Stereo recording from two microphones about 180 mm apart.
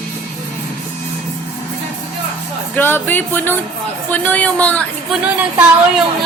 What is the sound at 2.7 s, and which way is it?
Speech, 10° left (ahead or behind).